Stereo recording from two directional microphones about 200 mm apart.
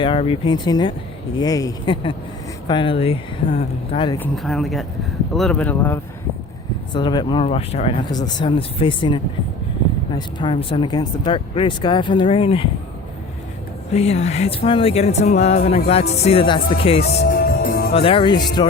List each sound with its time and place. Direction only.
0.0 s speech: 25° left (ahead or behind)
4.2 s speech: centre (ahead or behind)
6.9 s speech: 20° left (ahead or behind)
13.9 s speech: 30° left (ahead or behind)
17.1 s music: 50° left (ahead or behind)
17.9 s speech: 25° left (ahead or behind)